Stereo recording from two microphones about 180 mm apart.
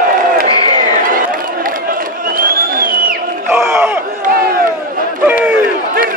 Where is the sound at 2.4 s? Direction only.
55° right (ahead or behind).